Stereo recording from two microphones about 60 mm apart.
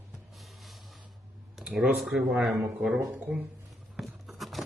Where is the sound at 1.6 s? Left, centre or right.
Centre.